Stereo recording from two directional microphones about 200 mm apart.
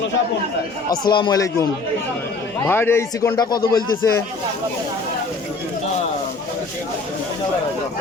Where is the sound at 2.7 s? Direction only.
10° left (ahead or behind).